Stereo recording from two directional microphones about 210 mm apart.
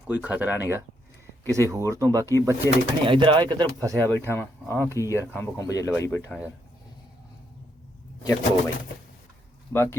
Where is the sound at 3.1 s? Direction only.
25° right (ahead or behind).